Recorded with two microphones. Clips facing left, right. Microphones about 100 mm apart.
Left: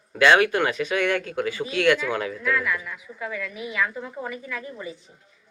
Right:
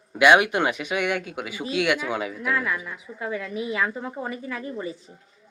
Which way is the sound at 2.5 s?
25° right (ahead or behind).